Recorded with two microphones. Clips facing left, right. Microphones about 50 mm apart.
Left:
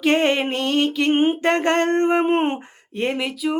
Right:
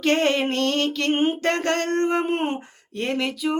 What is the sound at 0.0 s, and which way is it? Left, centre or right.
Music, centre.